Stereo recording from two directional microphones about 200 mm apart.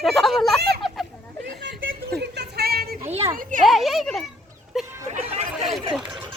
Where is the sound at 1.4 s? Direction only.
65° right (ahead or behind).